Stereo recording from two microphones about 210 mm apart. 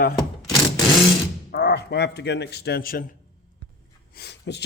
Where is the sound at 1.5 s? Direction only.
50° left (ahead or behind).